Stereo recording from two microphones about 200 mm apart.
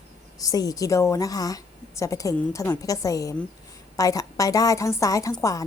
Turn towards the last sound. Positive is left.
turn(degrees=15)  # may be behind; listen again after turning